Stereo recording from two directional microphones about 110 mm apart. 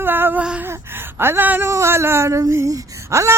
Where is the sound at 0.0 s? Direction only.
20° right (ahead or behind).